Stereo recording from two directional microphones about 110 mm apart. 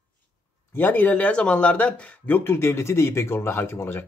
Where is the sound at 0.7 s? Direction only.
15° left (ahead or behind).